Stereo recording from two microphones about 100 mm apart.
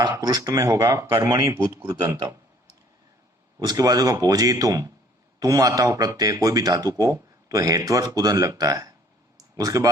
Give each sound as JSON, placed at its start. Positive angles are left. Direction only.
{"t": 0.2, "sound": "speech", "side_deg": -35}
{"t": 1.9, "sound": "speech", "side_deg": -40}
{"t": 3.6, "sound": "speech", "side_deg": -40}